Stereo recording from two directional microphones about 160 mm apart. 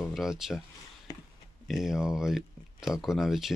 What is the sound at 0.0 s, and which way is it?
Speech, centre (ahead or behind).